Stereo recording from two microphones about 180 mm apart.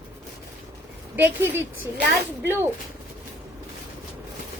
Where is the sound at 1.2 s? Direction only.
10° right (ahead or behind).